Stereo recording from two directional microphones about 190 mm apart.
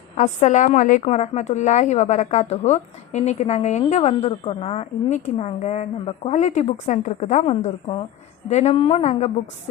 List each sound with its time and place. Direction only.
0.2 s a woman's voice: 40° left (ahead or behind)